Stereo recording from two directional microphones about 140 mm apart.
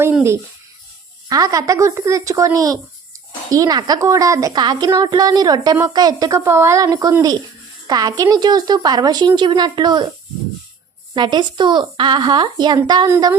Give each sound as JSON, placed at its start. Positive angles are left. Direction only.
{"t": 0.0, "sound": "a woman's voice", "side_deg": -15}
{"t": 11.1, "sound": "a woman's voice", "side_deg": -35}